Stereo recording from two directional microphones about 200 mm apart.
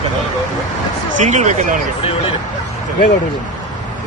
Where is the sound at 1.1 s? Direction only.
35° right (ahead or behind).